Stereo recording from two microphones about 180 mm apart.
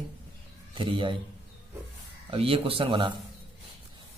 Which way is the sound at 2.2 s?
30° right (ahead or behind).